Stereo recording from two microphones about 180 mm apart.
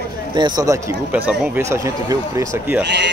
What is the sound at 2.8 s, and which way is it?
Speech, 75° right (ahead or behind).